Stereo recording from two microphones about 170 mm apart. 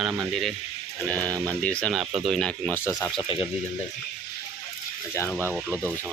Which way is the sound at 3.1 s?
30° left (ahead or behind).